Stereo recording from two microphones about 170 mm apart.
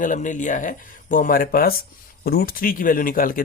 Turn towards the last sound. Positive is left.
turn(degrees=55)  # may be behind; listen again after turning